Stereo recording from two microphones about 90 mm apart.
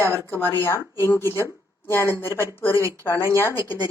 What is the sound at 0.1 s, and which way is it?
Speech, 25° left (ahead or behind).